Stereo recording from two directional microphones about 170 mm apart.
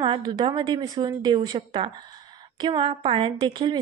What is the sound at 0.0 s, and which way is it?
A woman's voice, 25° right (ahead or behind).